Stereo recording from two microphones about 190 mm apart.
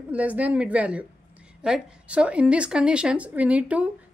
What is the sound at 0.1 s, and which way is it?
A woman's voice, 10° right (ahead or behind).